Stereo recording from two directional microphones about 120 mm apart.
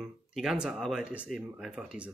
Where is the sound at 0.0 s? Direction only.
5° right (ahead or behind).